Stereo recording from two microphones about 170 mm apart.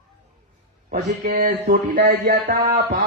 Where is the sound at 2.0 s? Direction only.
80° right.